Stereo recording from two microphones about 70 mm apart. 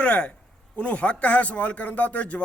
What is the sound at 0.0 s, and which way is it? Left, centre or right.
A man's voice, centre.